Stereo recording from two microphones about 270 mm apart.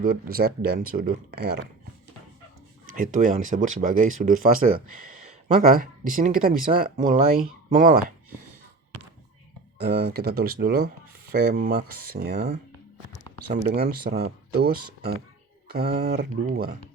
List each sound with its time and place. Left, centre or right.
0.0 s speech: right
2.9 s speech: right
9.8 s speech: right